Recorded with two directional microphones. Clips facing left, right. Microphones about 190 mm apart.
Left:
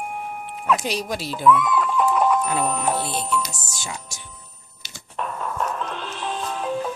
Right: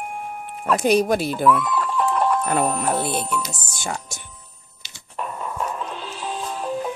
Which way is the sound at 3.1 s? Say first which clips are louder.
Even; 55° right (ahead or behind).